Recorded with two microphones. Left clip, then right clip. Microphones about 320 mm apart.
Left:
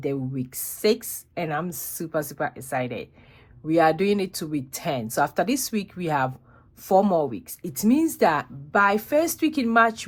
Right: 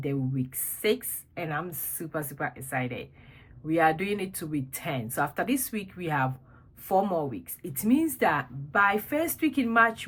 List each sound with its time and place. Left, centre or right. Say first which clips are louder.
0.0 s a woman's voice: left 4 dB; centre